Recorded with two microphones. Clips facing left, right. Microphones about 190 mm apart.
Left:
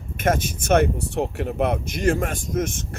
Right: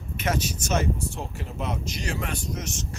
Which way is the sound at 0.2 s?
50° left (ahead or behind).